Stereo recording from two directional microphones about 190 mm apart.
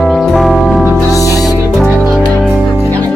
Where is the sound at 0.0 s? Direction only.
Centre (ahead or behind).